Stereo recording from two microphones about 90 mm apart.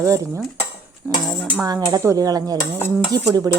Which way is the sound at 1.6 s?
45° right (ahead or behind).